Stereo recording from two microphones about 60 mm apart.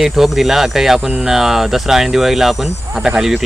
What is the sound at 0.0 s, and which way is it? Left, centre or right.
Speech, centre.